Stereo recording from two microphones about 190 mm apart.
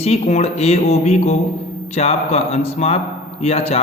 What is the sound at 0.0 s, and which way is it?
A man's voice, 35° left (ahead or behind).